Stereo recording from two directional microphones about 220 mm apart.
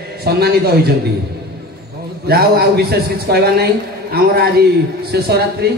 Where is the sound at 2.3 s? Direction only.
45° right (ahead or behind).